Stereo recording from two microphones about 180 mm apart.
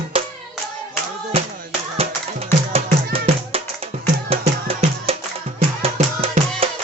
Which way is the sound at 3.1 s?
35° right (ahead or behind).